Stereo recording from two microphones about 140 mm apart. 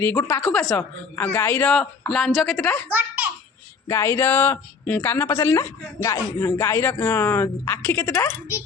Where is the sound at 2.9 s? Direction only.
10° right (ahead or behind).